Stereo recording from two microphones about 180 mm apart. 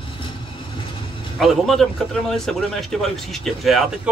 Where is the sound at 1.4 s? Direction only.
Centre (ahead or behind).